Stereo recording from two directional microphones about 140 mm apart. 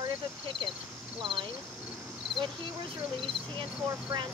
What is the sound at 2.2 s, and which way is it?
Cricket, centre (ahead or behind).